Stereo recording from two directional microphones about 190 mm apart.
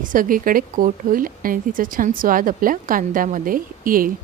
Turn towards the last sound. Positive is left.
turn(degrees=-45)  # may be behind; listen again after turning